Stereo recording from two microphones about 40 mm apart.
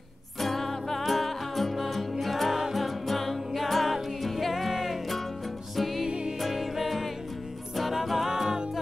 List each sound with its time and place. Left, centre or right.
0.4 s music: centre
6.0 s music: centre
6.4 s music: centre